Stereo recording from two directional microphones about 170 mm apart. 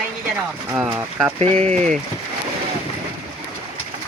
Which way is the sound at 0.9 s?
15° right (ahead or behind).